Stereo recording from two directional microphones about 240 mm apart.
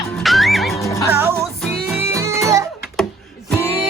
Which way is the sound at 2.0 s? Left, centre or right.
Centre.